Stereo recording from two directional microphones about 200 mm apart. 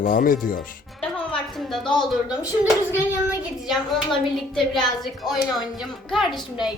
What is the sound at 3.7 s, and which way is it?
A woman's voice, centre (ahead or behind).